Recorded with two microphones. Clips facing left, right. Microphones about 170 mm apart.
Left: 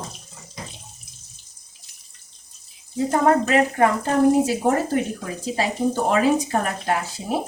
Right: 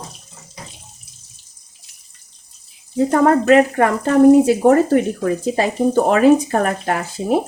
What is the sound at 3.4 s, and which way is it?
Speech, 70° right (ahead or behind).